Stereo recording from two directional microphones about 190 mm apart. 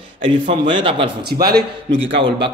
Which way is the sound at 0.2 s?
25° right (ahead or behind).